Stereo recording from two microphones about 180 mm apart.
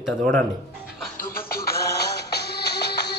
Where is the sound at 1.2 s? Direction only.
55° left (ahead or behind).